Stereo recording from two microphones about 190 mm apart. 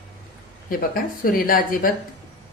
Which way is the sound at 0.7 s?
50° left (ahead or behind).